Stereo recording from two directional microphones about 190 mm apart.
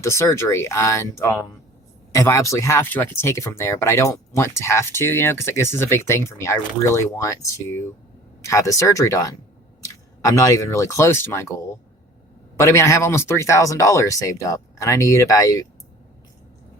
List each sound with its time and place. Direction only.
0.0 s speech: 15° left (ahead or behind)
12.5 s speech: 15° left (ahead or behind)